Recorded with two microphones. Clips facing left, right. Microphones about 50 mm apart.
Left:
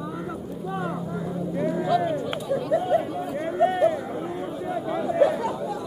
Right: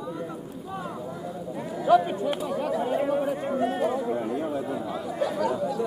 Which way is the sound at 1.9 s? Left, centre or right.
Right.